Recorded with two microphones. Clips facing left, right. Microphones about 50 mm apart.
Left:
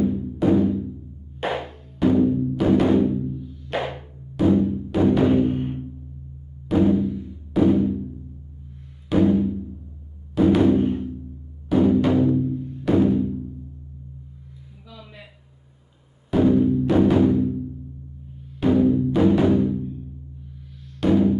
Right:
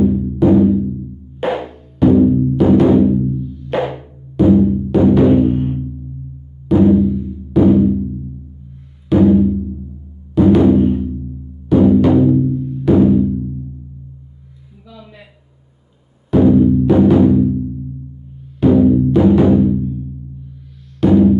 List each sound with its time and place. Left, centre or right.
0.0 s music: centre
6.9 s music: centre
9.1 s music: centre
16.3 s music: centre
18.7 s music: centre
21.0 s music: centre